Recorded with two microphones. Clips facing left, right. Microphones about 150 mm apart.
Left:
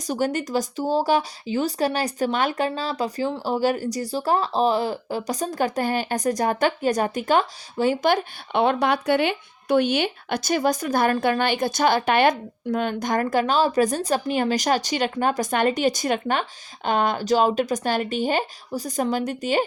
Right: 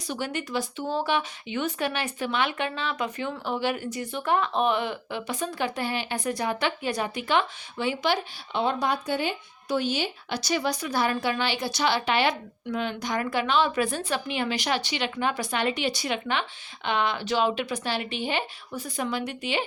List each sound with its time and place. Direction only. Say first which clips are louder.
0.0 s speech: left 7 dB; 45° left (ahead or behind)